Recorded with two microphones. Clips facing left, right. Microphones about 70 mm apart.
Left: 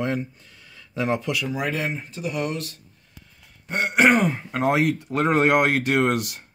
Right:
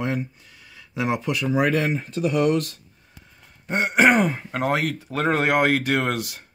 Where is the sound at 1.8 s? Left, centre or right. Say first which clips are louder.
Right 5 dB; right.